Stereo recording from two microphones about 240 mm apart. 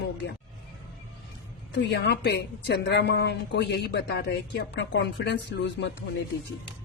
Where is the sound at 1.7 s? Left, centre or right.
Left.